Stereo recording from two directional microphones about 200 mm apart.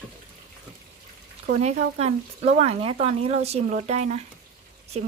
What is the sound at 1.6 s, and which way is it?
Speech, 35° right (ahead or behind).